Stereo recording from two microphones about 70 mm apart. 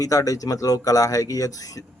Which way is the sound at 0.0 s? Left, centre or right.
Left.